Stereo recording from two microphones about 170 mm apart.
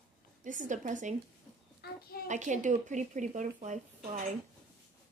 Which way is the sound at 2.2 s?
45° right (ahead or behind).